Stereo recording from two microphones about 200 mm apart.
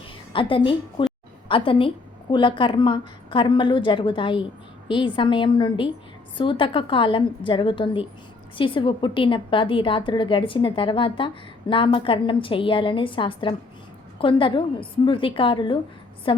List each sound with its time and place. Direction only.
0.3 s a woman's voice: 25° left (ahead or behind)